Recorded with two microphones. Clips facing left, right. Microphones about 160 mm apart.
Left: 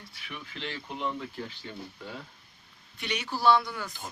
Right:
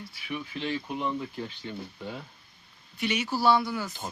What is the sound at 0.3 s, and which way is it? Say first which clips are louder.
Speech: right 7 dB; 10° right (ahead or behind).